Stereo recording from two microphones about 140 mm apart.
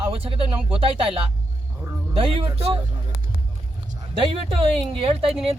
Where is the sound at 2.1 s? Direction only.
40° right (ahead or behind).